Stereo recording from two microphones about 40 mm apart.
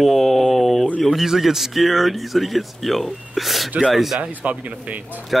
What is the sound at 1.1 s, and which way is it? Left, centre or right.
Speech, centre.